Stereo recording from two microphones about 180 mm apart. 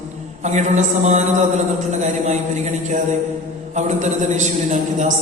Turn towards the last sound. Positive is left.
turn(degrees=-40)  # may be behind; listen again after turning